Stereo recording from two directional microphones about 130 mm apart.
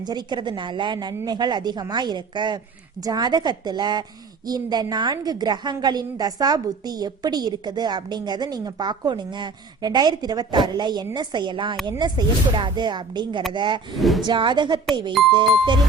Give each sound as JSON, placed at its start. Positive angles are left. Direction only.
{"t": 0.0, "sound": "a woman's voice", "side_deg": -35}
{"t": 13.9, "sound": "speech", "side_deg": 0}
{"t": 14.3, "sound": "a woman's voice", "side_deg": -35}